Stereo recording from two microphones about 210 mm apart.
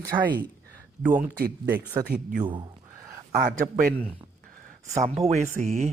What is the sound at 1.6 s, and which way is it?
Speech, 10° right (ahead or behind).